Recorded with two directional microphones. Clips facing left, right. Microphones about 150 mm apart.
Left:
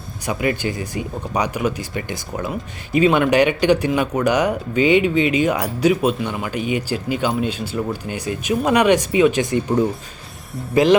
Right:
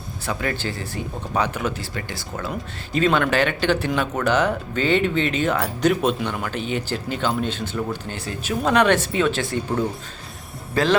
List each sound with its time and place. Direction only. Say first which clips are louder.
0.3 s speech: left 5 dB; 15° left (ahead or behind)